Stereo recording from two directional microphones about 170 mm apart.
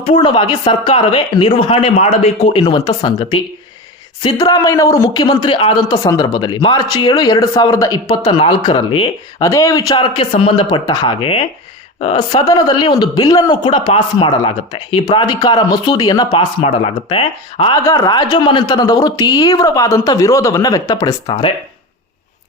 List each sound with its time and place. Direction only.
0.0 s a man's voice: 30° left (ahead or behind)
5.1 s a man's voice: 25° left (ahead or behind)
9.4 s a man's voice: 20° left (ahead or behind); by 12.4 s 40° left (ahead or behind)
12.4 s a man's voice: 20° left (ahead or behind)
17.8 s a man's voice: 20° left (ahead or behind)